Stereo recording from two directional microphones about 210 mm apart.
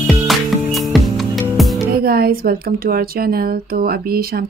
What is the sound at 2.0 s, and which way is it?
Speech, 45° right (ahead or behind).